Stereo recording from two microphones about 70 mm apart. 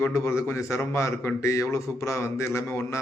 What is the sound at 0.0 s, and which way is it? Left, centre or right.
A man's voice, left.